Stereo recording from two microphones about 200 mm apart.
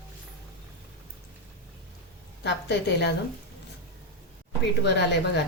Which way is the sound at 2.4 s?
60° left (ahead or behind).